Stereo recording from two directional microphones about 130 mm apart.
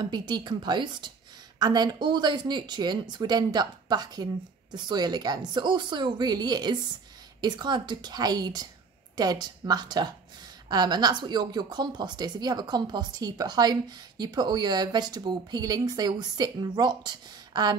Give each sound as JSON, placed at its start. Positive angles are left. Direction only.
{"t": 0.0, "sound": "a woman's voice", "side_deg": -35}